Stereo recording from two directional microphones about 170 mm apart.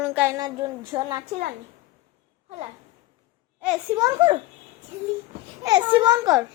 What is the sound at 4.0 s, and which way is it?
Speech, 30° right (ahead or behind).